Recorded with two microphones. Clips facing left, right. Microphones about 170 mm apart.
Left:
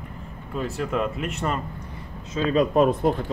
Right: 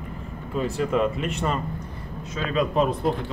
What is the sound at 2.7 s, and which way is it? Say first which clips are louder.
Speech: left 4 dB; 45° left (ahead or behind).